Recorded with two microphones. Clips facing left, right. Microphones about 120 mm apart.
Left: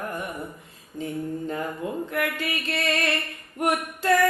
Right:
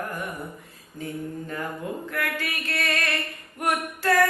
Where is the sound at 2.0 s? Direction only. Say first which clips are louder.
Left 2 dB; 20° left (ahead or behind).